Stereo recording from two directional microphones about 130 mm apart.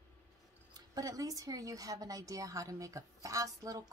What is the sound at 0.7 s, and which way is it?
Speech, 30° right (ahead or behind).